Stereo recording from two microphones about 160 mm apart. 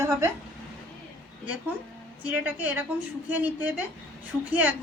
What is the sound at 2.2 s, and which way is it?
A woman's voice, 10° right (ahead or behind).